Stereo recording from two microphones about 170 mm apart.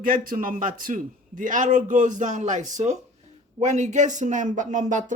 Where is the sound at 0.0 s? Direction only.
55° right (ahead or behind).